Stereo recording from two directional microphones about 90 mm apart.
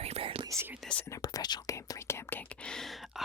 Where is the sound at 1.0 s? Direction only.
40° left (ahead or behind).